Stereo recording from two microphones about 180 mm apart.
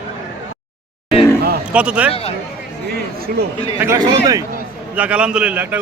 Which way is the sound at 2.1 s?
35° left (ahead or behind).